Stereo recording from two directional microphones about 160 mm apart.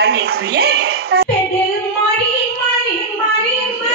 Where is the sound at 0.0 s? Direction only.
80° right.